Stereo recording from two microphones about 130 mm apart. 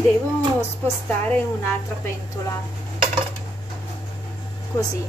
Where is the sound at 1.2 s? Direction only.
10° left (ahead or behind).